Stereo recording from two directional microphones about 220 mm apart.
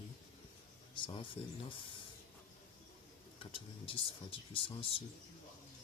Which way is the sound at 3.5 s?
25° left (ahead or behind).